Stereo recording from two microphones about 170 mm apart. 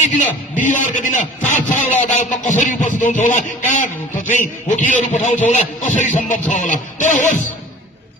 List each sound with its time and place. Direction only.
0.0 s speech: 50° left (ahead or behind)